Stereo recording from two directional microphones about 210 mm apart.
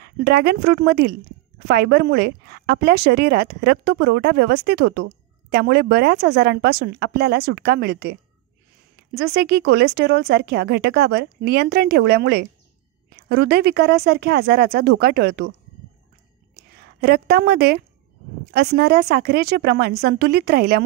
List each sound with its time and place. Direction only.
0.0 s speech: 50° right (ahead or behind)
16.5 s speech: 50° right (ahead or behind)